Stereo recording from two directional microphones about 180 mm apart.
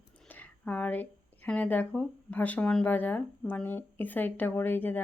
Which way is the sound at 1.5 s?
10° left (ahead or behind).